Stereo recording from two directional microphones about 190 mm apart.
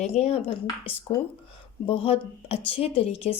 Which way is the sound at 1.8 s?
30° left (ahead or behind).